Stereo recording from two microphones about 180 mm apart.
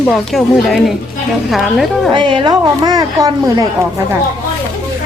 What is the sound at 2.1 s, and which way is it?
A woman's voice, 25° right (ahead or behind).